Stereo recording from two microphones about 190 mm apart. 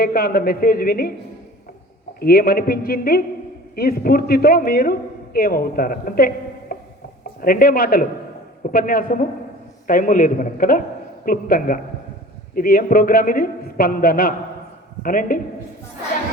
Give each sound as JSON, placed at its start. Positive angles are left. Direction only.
{"t": 0.0, "sound": "a man's voice", "side_deg": 50}
{"t": 2.1, "sound": "a man's voice", "side_deg": 50}